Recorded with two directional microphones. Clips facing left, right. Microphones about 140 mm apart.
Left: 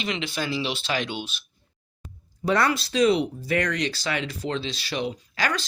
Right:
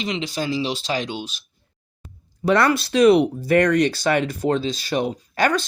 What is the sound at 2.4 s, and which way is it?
Speech, 70° right (ahead or behind).